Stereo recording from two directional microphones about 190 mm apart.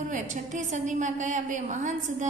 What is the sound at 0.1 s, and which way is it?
A woman's voice, 40° right (ahead or behind).